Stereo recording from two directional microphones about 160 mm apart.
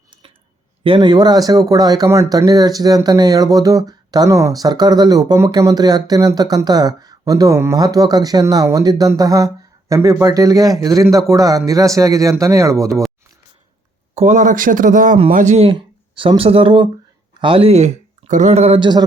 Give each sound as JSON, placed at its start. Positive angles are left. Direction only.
{"t": 0.9, "sound": "speech", "side_deg": -30}
{"t": 14.2, "sound": "speech", "side_deg": -50}